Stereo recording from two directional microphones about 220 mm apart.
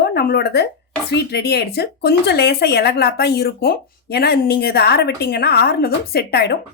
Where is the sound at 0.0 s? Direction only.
45° left (ahead or behind).